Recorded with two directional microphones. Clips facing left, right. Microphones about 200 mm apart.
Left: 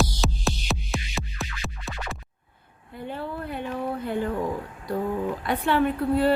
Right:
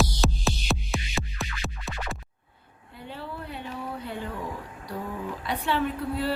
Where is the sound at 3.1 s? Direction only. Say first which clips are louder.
Left 5 dB; 50° left (ahead or behind).